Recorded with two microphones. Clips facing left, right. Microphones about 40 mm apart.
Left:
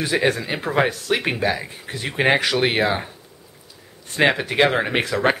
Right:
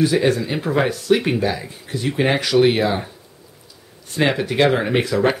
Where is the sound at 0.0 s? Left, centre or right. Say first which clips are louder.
Right 3 dB; left.